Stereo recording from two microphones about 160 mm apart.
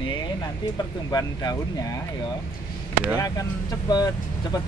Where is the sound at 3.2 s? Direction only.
25° left (ahead or behind).